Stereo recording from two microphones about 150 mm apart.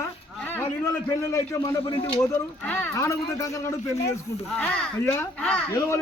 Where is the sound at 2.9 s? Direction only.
20° left (ahead or behind).